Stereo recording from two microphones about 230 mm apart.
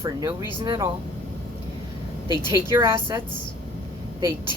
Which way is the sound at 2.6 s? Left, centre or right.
Centre.